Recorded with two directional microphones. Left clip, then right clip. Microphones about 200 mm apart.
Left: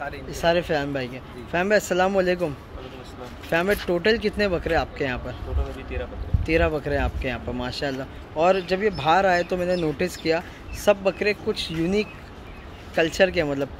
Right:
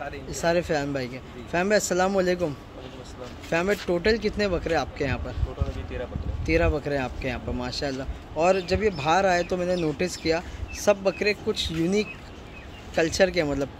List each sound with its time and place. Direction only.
0.3 s speech: centre (ahead or behind)
6.4 s speech: centre (ahead or behind)